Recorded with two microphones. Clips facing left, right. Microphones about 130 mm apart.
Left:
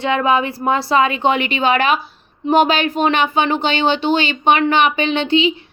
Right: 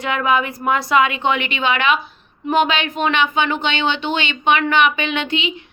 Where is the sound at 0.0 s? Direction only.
30° left (ahead or behind).